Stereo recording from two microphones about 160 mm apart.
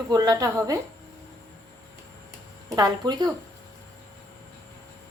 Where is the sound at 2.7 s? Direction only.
25° right (ahead or behind).